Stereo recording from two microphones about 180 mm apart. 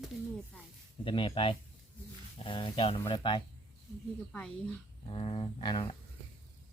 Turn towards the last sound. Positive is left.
turn(degrees=30)  # may be behind; listen again after turning